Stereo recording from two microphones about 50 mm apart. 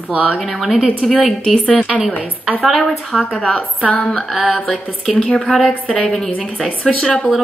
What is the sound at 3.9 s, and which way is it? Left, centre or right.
Speech, left.